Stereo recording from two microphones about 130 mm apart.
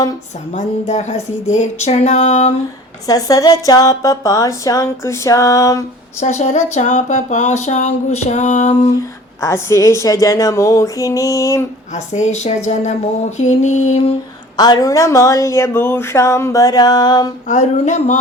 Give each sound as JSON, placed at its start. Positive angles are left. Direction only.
{"t": 0.5, "sound": "a sound", "side_deg": 65}
{"t": 3.1, "sound": "speech", "side_deg": 30}
{"t": 6.1, "sound": "speech", "side_deg": 60}
{"t": 9.4, "sound": "speech", "side_deg": 20}
{"t": 11.9, "sound": "a sound", "side_deg": 65}
{"t": 14.5, "sound": "speech", "side_deg": 30}
{"t": 17.5, "sound": "speech", "side_deg": 70}